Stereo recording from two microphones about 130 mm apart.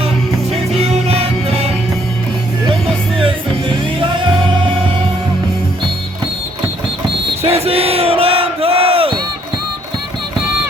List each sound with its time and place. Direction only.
0.8 s music: 55° right (ahead or behind)
4.0 s music: 40° right (ahead or behind)
7.4 s battle cry: 50° right (ahead or behind)